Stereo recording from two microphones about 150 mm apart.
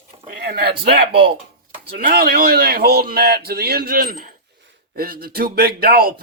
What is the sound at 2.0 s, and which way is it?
A man's voice, 80° right.